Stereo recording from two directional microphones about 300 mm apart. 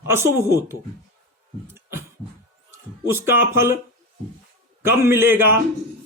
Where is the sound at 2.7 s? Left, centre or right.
Centre.